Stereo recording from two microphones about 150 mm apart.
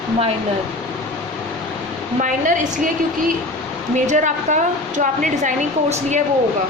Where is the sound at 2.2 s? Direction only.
60° right (ahead or behind).